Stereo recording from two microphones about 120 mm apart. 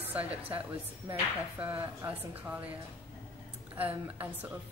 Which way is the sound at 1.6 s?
15° right (ahead or behind).